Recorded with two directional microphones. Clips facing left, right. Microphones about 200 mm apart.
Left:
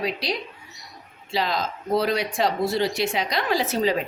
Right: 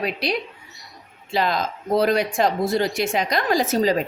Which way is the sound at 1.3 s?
50° right (ahead or behind).